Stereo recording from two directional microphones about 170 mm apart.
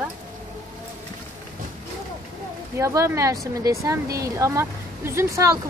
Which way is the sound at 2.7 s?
15° right (ahead or behind).